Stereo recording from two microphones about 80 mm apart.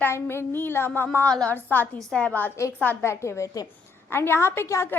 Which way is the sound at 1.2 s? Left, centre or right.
Centre.